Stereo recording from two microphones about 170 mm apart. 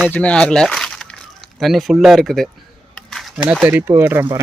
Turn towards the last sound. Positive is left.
turn(degrees=-15)  # may be behind; listen again after turning